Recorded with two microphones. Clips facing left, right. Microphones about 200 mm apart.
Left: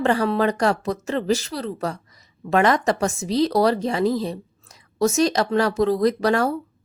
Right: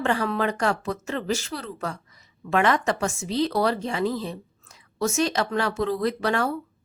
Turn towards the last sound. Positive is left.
turn(degrees=40)  # may be behind; listen again after turning